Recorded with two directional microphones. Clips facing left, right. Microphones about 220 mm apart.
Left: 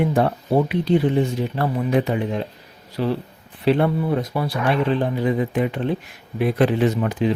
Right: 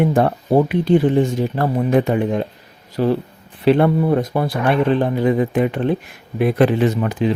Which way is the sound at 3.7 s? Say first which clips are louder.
Right 4 dB; 60° right (ahead or behind).